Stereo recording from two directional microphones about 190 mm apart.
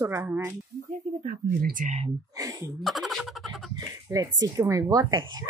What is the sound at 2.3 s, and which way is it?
Speech, 15° right (ahead or behind).